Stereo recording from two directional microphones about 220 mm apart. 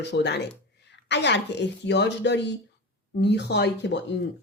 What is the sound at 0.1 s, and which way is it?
Speech, 50° left (ahead or behind).